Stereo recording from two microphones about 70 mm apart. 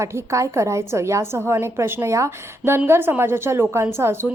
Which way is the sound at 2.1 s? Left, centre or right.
Right.